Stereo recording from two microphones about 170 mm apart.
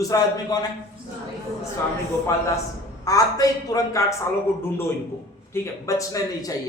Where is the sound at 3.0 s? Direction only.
20° left (ahead or behind).